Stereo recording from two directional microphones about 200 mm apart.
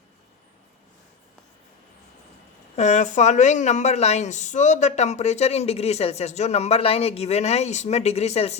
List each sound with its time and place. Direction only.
2.7 s a woman's voice: 35° left (ahead or behind)